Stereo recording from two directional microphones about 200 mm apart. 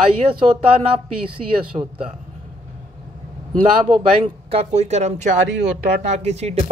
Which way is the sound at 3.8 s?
25° right (ahead or behind).